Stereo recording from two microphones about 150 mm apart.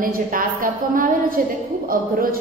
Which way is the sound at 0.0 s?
70° right (ahead or behind).